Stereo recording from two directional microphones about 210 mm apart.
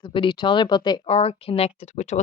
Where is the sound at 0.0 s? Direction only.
25° left (ahead or behind).